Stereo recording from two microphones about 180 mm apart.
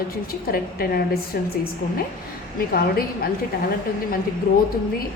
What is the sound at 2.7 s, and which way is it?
Speech, 55° left (ahead or behind).